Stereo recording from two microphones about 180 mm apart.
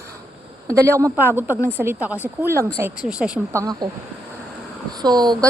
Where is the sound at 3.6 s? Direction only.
20° right (ahead or behind).